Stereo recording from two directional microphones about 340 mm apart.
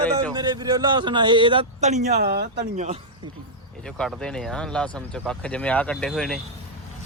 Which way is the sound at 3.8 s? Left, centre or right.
Centre.